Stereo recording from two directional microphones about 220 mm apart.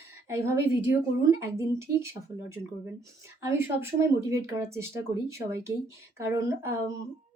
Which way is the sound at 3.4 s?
15° right (ahead or behind).